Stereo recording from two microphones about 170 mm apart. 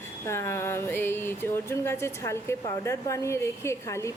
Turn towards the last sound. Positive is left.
turn(degrees=15)  # may be behind; listen again after turning